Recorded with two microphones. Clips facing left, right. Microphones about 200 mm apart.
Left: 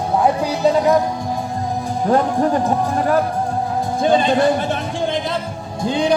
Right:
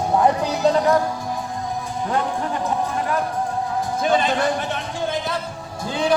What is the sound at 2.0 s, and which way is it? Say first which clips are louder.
Speech: left 8 dB; 40° left (ahead or behind).